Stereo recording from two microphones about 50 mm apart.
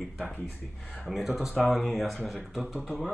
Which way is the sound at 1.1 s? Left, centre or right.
Centre.